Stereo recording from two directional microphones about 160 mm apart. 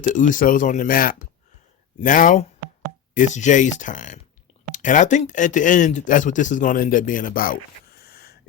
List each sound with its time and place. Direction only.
0.0 s speech: 55° left (ahead or behind)
8.1 s wheeze: 70° left (ahead or behind)